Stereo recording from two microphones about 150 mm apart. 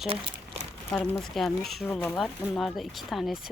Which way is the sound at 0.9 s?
10° left (ahead or behind).